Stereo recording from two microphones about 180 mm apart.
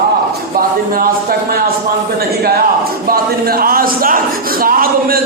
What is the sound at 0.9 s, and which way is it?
Speech, 55° right (ahead or behind).